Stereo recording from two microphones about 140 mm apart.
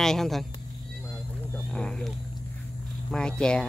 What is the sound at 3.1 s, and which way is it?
Speech, 5° left (ahead or behind).